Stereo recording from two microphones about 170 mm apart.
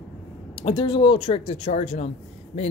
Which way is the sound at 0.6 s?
25° left (ahead or behind).